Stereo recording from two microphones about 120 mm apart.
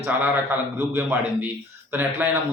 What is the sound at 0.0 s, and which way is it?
A man's voice, 20° right (ahead or behind).